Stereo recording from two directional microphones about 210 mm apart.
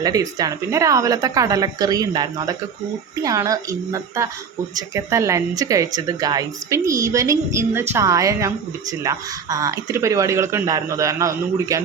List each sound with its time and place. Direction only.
0.0 s a woman's voice: 15° right (ahead or behind)